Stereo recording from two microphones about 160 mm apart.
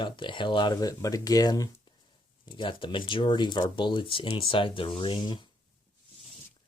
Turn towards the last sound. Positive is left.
turn(degrees=30)  # may be behind; listen again after turning